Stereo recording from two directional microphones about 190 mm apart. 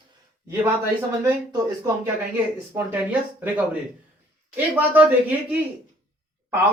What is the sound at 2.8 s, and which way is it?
Speech, 10° right (ahead or behind).